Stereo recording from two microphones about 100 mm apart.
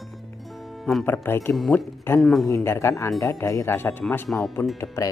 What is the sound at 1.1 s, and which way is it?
Speech, 20° left (ahead or behind).